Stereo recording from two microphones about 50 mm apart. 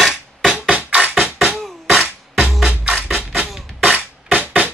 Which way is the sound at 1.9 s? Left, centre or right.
Centre.